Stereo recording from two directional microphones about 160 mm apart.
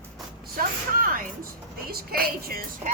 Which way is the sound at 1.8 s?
70° right (ahead or behind).